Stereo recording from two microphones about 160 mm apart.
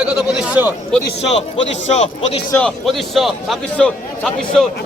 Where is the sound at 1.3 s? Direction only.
45° left (ahead or behind).